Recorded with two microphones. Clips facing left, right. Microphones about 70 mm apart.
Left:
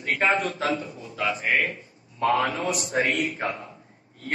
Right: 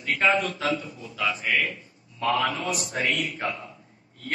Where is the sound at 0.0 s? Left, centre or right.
Left.